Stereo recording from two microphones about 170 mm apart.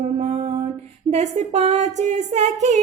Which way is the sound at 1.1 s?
40° right (ahead or behind).